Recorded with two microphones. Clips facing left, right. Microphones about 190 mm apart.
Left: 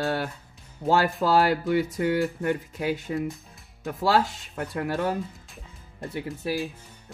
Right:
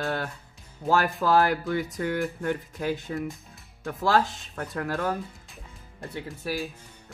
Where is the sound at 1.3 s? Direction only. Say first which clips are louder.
Left 2 dB; 10° left (ahead or behind).